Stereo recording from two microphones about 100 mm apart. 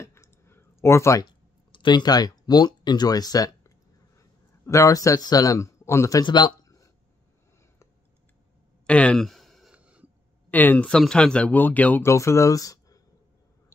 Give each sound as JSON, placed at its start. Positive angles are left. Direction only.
{"t": 0.0, "sound": "clicking", "side_deg": 25}
{"t": 1.7, "sound": "speech", "side_deg": 50}
{"t": 6.2, "sound": "speech", "side_deg": 50}
{"t": 8.8, "sound": "a sound", "side_deg": 10}
{"t": 9.7, "sound": "a sound", "side_deg": -10}
{"t": 10.5, "sound": "a man's voice", "side_deg": 15}
{"t": 12.0, "sound": "speech", "side_deg": 30}